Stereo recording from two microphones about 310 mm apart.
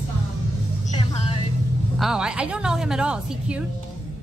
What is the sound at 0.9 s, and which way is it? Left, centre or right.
Music, centre.